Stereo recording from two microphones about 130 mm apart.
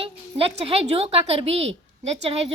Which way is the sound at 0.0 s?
45° right (ahead or behind).